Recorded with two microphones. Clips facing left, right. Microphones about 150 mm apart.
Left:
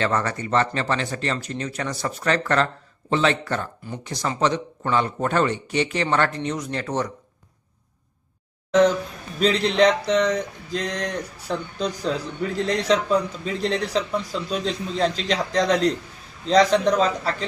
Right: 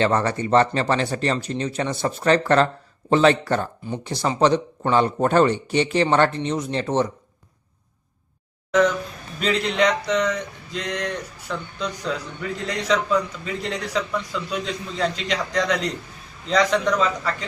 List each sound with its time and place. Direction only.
0.0 s speech: 30° right (ahead or behind)
8.7 s speech: 30° left (ahead or behind)